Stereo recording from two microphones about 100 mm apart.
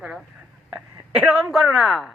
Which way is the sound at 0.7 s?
10° right (ahead or behind).